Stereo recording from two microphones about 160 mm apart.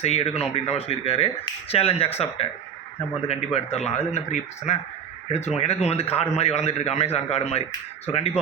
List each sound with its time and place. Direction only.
0.0 s speech: 40° left (ahead or behind)